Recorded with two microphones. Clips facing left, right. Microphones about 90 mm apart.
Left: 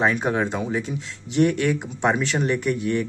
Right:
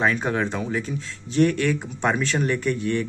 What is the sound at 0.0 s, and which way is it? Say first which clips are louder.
Speech: left 1 dB; 20° left (ahead or behind).